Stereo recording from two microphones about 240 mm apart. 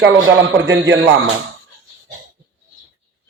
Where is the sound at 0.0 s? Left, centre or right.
Right.